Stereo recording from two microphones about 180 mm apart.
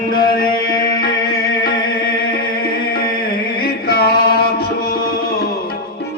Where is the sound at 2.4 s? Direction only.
55° left (ahead or behind).